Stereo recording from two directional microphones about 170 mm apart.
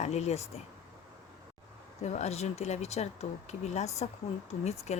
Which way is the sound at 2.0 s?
40° left (ahead or behind).